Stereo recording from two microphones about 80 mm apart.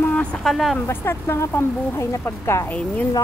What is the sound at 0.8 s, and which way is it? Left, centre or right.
Speech, left.